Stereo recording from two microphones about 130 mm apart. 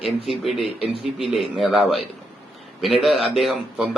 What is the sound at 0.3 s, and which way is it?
Speech, centre (ahead or behind).